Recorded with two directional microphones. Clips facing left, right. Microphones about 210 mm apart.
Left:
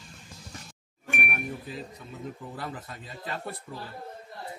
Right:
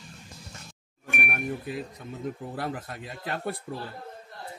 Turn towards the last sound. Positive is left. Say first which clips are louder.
# right 4 dB
turn(degrees=-60)  # may be behind; listen again after turning